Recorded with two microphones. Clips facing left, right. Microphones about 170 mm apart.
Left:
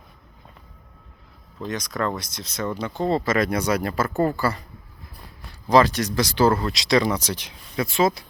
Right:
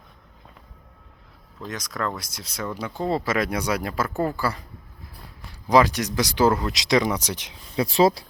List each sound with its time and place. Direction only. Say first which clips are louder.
1.6 s speech: left 3 dB; centre (ahead or behind)
5.6 s speech: left 1 dB; 15° right (ahead or behind)
7.8 s speech: right 2 dB; 35° right (ahead or behind)